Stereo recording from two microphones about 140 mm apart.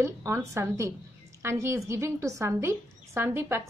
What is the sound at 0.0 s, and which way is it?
A woman's voice, 20° right (ahead or behind).